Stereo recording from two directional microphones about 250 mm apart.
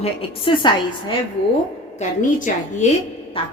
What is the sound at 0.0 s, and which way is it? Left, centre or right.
Speech, left.